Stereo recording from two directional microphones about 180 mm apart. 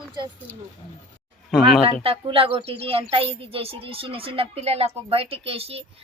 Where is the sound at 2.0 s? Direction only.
30° right (ahead or behind).